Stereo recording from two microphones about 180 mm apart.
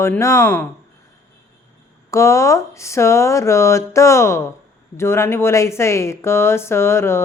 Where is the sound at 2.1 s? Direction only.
15° left (ahead or behind).